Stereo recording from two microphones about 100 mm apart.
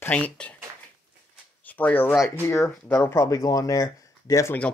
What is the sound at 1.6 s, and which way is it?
Speech, 15° left (ahead or behind).